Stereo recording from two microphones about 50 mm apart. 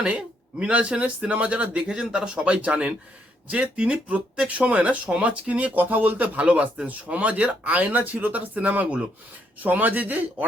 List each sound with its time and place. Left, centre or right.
0.6 s speech: right
5.8 s speech: right
6.4 s speech: right